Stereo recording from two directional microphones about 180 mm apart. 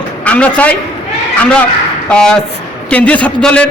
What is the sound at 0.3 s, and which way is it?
Speech, 5° left (ahead or behind).